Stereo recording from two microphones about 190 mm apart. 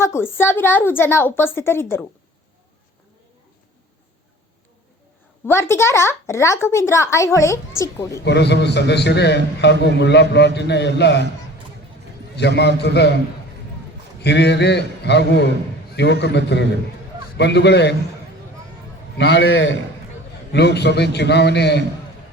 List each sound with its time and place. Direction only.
0.0 s speech: 15° left (ahead or behind)
5.5 s speech: 15° left (ahead or behind)
8.2 s a man's voice: 65° left (ahead or behind)
12.4 s a man's voice: 65° left (ahead or behind)
14.2 s a man's voice: 60° left (ahead or behind)
19.1 s a man's voice: 65° left (ahead or behind)
20.5 s a man's voice: 60° left (ahead or behind)